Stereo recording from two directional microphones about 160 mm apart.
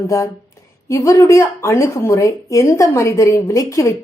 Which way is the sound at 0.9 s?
20° left (ahead or behind).